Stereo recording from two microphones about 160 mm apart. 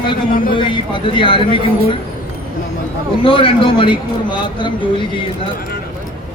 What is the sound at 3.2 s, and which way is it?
A man's voice, 35° left (ahead or behind).